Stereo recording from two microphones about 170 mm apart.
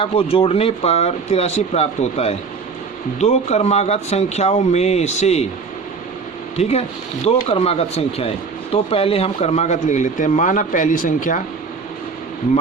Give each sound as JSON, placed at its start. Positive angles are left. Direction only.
{"t": 0.0, "sound": "speech", "side_deg": 35}
{"t": 6.6, "sound": "speech", "side_deg": 40}